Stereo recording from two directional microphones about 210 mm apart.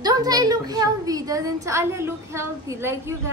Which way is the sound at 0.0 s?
20° right (ahead or behind).